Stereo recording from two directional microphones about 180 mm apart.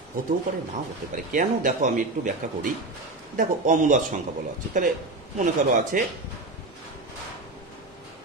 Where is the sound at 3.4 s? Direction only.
45° right (ahead or behind).